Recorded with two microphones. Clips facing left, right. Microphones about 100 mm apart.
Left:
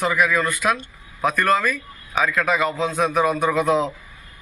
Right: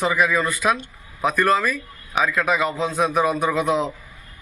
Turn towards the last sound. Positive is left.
turn(degrees=-15)  # may be behind; listen again after turning